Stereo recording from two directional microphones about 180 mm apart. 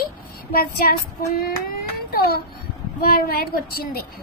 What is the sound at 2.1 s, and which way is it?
Speech, 60° left (ahead or behind).